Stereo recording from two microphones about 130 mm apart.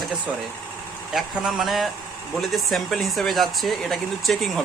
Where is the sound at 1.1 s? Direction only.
Centre (ahead or behind).